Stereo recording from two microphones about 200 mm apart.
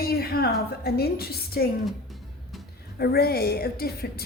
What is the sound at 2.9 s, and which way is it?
Speech, 50° left (ahead or behind).